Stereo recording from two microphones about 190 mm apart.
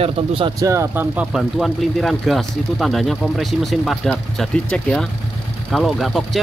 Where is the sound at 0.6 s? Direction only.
15° right (ahead or behind).